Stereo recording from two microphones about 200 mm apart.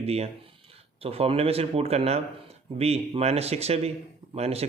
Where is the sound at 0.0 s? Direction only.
30° right (ahead or behind).